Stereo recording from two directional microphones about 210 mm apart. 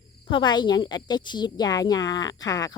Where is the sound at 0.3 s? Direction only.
20° left (ahead or behind).